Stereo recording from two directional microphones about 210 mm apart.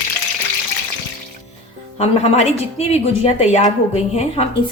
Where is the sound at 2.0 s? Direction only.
30° left (ahead or behind).